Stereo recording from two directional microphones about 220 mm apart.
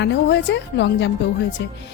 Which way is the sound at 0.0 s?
50° left (ahead or behind).